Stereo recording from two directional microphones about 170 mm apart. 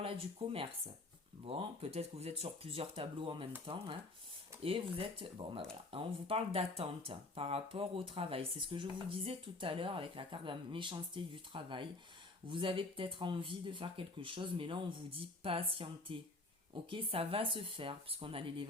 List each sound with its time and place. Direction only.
0.0 s speech: 30° right (ahead or behind)